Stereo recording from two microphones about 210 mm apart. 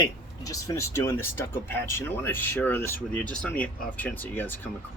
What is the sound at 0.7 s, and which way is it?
Speech, 15° left (ahead or behind).